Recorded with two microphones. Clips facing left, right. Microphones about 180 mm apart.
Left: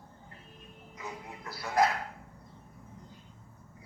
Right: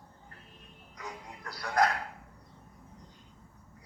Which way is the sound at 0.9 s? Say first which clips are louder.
Left 1 dB; 5° left (ahead or behind).